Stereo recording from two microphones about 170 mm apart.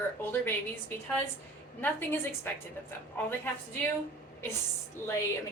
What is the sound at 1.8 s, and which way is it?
Speech, 10° left (ahead or behind).